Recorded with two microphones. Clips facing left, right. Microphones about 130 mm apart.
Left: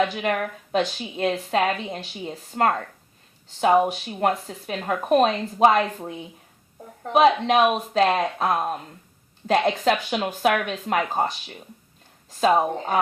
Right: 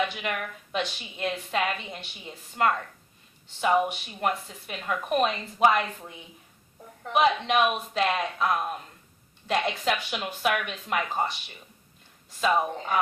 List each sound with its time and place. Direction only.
0.0 s a woman's voice: 45° left (ahead or behind)